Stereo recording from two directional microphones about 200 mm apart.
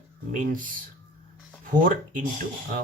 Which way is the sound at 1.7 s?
45° right (ahead or behind).